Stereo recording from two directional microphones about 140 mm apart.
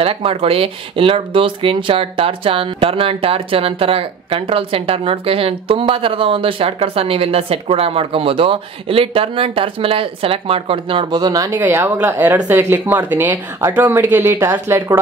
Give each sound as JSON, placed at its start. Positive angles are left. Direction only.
{"t": 0.0, "sound": "speech", "side_deg": -40}
{"t": 11.5, "sound": "speech", "side_deg": -15}